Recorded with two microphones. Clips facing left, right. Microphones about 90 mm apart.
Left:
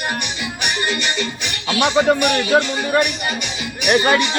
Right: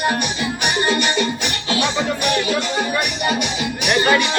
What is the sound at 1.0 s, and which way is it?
Music, 15° right (ahead or behind).